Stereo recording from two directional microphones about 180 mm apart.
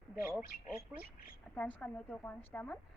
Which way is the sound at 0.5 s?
50° left (ahead or behind).